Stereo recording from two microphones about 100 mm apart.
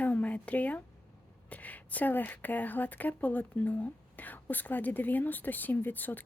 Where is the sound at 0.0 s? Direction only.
15° left (ahead or behind).